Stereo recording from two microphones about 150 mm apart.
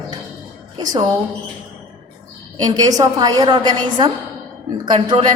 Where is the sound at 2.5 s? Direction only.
25° right (ahead or behind).